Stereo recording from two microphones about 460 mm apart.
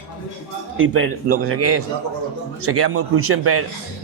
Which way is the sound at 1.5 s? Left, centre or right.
Right.